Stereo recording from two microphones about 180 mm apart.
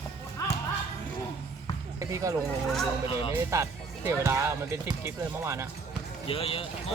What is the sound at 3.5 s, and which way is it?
Speech, 15° right (ahead or behind).